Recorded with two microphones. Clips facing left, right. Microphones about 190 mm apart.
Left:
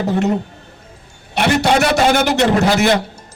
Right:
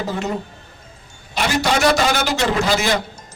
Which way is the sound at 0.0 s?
65° left (ahead or behind).